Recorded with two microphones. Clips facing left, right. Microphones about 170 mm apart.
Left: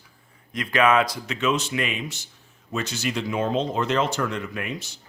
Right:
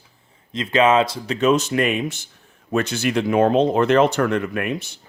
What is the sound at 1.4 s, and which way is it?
Speech, 40° right (ahead or behind).